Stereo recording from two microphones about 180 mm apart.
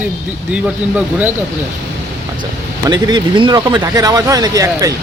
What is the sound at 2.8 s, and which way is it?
Speech, 20° right (ahead or behind).